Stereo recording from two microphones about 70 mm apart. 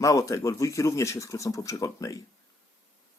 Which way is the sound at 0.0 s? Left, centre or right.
Left.